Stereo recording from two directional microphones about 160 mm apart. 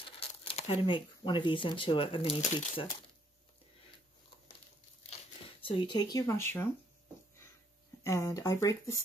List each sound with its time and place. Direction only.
0.0 s speech: 35° left (ahead or behind)
2.4 s speech: 45° left (ahead or behind)
2.7 s speech: 35° left (ahead or behind)
5.1 s speech: 35° left (ahead or behind); by 6.7 s 15° left (ahead or behind)
8.0 s speech: 20° left (ahead or behind)